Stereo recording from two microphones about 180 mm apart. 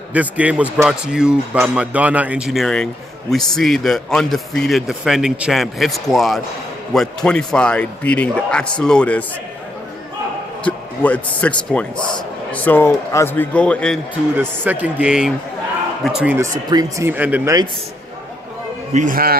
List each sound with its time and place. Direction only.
0.1 s speech: 10° right (ahead or behind)
10.6 s a man's voice: 10° left (ahead or behind)
14.3 s speech: 10° right (ahead or behind)
16.6 s speech: 20° right (ahead or behind)
17.1 s speech: 10° right (ahead or behind)
18.9 s a man's voice: 50° right (ahead or behind)